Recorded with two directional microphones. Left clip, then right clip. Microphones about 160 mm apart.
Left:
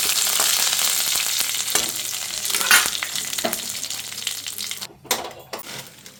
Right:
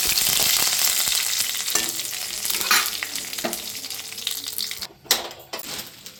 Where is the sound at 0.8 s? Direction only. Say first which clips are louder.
Even; centre (ahead or behind).